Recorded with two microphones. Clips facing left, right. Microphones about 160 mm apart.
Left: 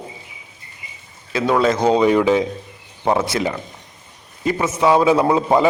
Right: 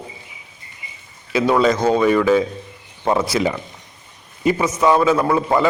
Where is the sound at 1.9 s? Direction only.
20° left (ahead or behind).